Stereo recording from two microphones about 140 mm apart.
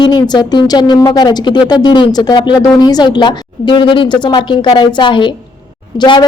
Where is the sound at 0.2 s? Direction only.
30° left (ahead or behind).